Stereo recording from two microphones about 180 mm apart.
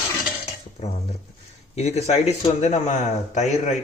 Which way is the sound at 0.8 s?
35° left (ahead or behind).